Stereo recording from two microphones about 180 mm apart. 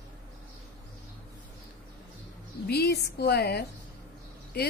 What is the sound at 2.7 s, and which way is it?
Speech, 65° left (ahead or behind).